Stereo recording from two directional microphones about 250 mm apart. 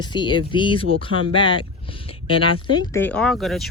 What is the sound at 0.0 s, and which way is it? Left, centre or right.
Speech, centre.